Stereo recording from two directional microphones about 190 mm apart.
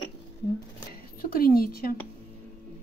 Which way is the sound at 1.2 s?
50° left (ahead or behind).